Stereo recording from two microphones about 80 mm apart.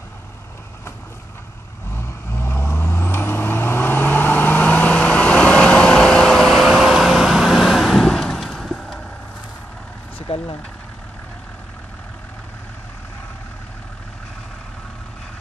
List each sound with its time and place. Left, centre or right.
1.9 s vehicle: left; by 9.0 s centre